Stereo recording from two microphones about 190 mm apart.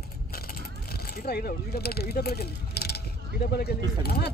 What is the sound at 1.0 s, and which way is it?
Speech, 50° left (ahead or behind).